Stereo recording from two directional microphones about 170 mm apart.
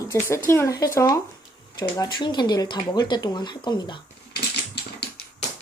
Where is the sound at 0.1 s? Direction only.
15° left (ahead or behind).